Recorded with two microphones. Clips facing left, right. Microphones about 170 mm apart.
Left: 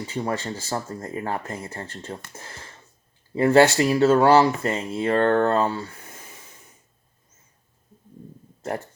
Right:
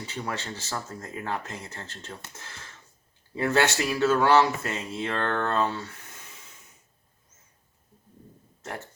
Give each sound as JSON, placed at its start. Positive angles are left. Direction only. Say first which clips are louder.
{"t": 0.1, "sound": "speech", "louder": "left 7 dB", "side_deg": 30}
{"t": 1.3, "sound": "speech", "louder": "left 4 dB", "side_deg": 50}
{"t": 3.3, "sound": "speech", "louder": "left 8 dB", "side_deg": 30}
{"t": 4.6, "sound": "speech", "louder": "left 7 dB", "side_deg": 55}
{"t": 4.9, "sound": "speech", "louder": "left 10 dB", "side_deg": 35}